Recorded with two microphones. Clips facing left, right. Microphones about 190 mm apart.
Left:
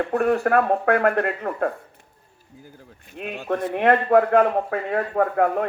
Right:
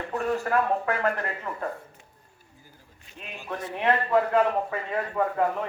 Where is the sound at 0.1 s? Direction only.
60° left (ahead or behind).